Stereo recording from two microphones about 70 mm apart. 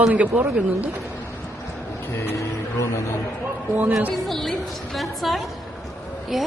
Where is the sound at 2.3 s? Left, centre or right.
Left.